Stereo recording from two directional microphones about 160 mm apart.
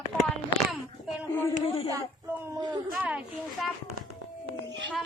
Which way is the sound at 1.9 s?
15° right (ahead or behind).